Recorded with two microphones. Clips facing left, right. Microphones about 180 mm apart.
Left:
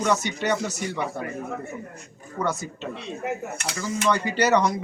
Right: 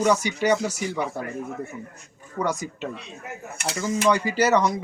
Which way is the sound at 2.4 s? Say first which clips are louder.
Right 1 dB; 10° right (ahead or behind).